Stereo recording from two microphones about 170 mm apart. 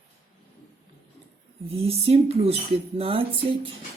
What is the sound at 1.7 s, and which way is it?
Speech, 35° right (ahead or behind).